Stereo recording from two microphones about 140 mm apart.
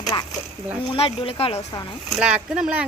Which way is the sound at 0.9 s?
40° left (ahead or behind).